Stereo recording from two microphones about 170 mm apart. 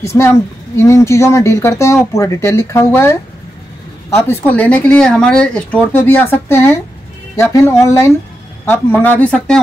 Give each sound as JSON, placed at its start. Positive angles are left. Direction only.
{"t": 0.0, "sound": "speech", "side_deg": 15}